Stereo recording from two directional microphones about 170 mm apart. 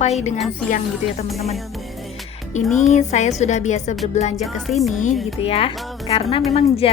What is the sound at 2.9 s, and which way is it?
A woman's voice, 45° left (ahead or behind).